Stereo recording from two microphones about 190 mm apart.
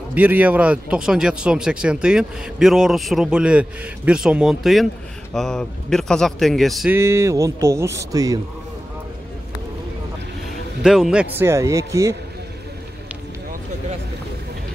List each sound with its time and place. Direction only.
0.1 s speech: 10° right (ahead or behind)
7.0 s speech: 15° right (ahead or behind)
10.8 s speech: 5° right (ahead or behind)